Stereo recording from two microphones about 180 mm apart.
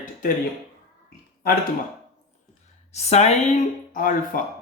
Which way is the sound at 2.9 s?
40° left (ahead or behind).